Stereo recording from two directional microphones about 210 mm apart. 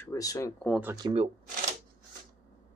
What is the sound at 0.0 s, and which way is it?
Speech, 15° left (ahead or behind).